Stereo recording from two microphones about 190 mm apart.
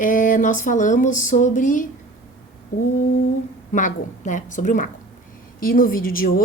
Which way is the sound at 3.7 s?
40° left (ahead or behind).